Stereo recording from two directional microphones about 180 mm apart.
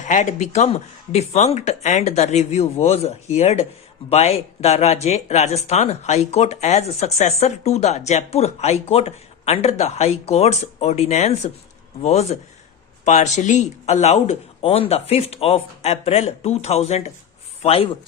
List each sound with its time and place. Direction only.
0.0 s a man's voice: 40° left (ahead or behind)